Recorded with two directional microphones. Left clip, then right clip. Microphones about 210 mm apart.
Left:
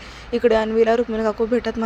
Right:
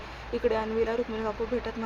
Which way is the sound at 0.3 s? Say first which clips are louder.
Left 10 dB; 30° left (ahead or behind).